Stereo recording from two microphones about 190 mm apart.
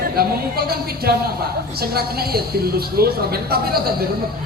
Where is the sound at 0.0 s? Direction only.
55° right (ahead or behind).